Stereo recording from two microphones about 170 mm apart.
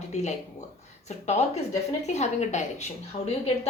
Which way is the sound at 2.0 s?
40° left (ahead or behind).